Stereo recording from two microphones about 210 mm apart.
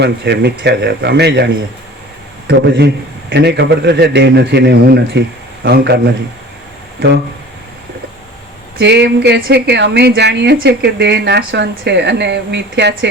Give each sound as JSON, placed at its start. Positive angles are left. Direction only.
{"t": 0.0, "sound": "speech", "side_deg": -55}
{"t": 2.5, "sound": "speech", "side_deg": -50}
{"t": 8.8, "sound": "speech", "side_deg": -55}